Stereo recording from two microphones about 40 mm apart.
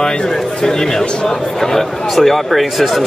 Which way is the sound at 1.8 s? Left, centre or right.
Centre.